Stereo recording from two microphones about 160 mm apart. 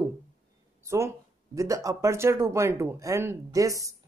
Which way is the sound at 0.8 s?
20° right (ahead or behind).